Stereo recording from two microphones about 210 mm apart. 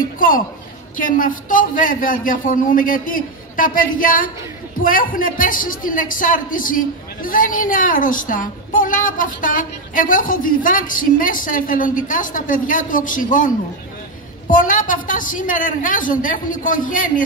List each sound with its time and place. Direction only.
0.9 s speech: 40° left (ahead or behind)
14.5 s speech: 40° left (ahead or behind)